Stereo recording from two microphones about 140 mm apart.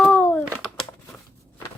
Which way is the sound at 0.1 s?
10° left (ahead or behind).